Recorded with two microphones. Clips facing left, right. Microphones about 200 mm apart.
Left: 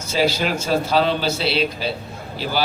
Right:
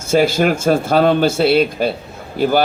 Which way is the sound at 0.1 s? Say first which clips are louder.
Right 6 dB; 50° right (ahead or behind).